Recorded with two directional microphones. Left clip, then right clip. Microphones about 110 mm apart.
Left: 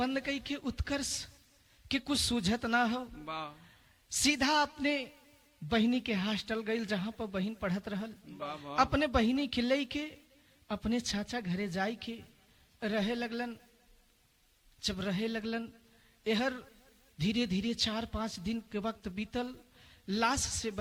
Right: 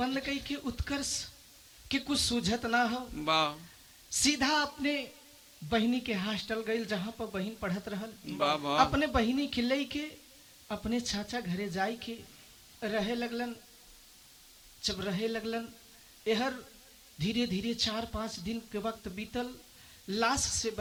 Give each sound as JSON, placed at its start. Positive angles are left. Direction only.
{"t": 0.0, "sound": "speech", "side_deg": 0}
{"t": 3.2, "sound": "a man's voice", "side_deg": -35}
{"t": 4.1, "sound": "speech", "side_deg": 0}
{"t": 8.3, "sound": "a man's voice", "side_deg": -35}
{"t": 8.8, "sound": "speech", "side_deg": 0}
{"t": 14.8, "sound": "speech", "side_deg": 0}